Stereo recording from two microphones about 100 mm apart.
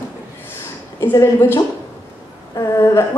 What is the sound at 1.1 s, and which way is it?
Speech, 30° left (ahead or behind).